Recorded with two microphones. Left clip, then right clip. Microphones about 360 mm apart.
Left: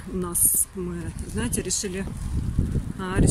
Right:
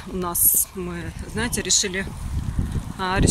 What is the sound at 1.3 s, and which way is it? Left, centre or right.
Speech, centre.